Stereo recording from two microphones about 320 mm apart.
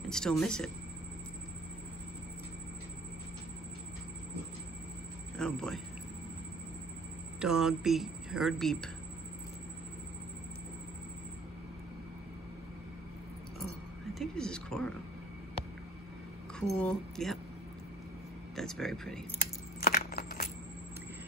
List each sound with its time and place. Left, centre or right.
0.1 s speech: centre
5.4 s speech: centre
7.3 s speech: centre
14.1 s speech: centre
16.7 s speech: centre
18.6 s speech: centre
19.8 s a sound: left